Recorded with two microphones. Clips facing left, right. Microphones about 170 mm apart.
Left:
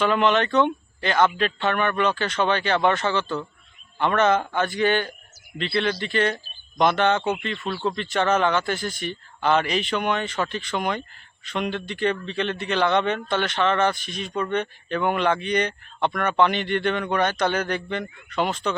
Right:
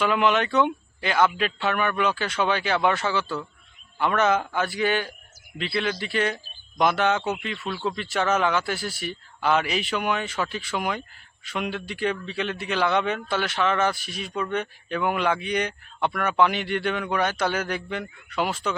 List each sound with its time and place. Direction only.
0.0 s a man's voice: 5° right (ahead or behind)